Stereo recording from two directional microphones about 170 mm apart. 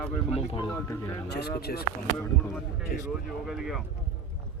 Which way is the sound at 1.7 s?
60° left (ahead or behind).